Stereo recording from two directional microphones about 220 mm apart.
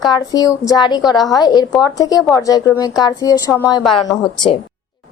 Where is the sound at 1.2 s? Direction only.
Centre (ahead or behind).